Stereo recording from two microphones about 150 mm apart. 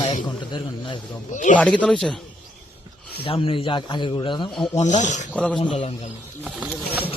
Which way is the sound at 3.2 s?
35° left (ahead or behind).